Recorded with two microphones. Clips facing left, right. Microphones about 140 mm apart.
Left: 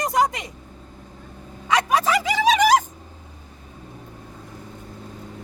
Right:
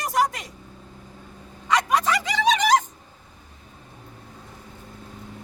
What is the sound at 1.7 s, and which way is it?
Music, centre (ahead or behind).